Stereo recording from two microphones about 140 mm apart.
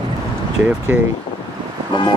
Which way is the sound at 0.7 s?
10° right (ahead or behind).